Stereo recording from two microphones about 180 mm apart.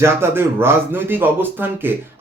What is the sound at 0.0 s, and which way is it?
Speech, 15° right (ahead or behind).